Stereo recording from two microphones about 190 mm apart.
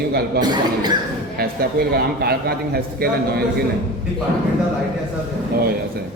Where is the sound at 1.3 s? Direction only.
55° right (ahead or behind).